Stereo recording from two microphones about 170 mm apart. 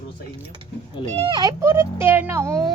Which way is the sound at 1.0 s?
35° right (ahead or behind).